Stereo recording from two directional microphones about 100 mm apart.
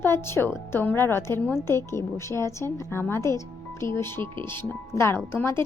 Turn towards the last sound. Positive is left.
turn(degrees=25)  # may be behind; listen again after turning